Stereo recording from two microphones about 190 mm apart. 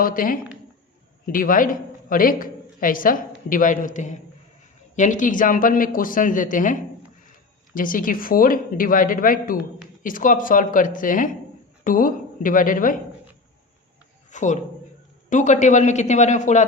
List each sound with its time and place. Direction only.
0.0 s a woman's voice: 50° left (ahead or behind)
14.3 s speech: 40° left (ahead or behind)